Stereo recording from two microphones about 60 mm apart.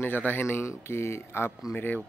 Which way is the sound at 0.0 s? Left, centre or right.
Left.